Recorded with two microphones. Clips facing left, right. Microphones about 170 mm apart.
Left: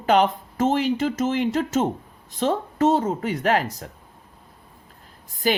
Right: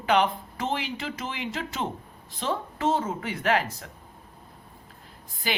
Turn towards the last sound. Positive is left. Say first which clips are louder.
# left 9 dB
turn(degrees=45)  # may be behind; listen again after turning